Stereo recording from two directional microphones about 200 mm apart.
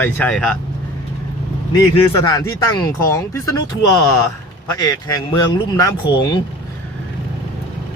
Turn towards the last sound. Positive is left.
turn(degrees=20)  # may be behind; listen again after turning